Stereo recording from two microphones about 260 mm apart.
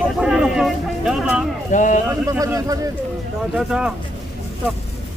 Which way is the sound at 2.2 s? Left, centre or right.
Centre.